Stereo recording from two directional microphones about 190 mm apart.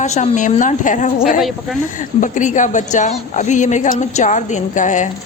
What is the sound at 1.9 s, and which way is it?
A woman's voice, 40° left (ahead or behind).